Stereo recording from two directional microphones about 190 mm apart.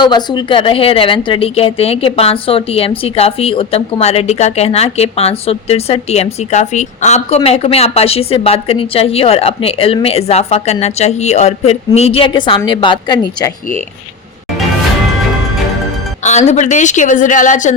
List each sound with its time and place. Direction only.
0.0 s a woman's voice: 25° left (ahead or behind)
16.2 s a woman's voice: 35° left (ahead or behind)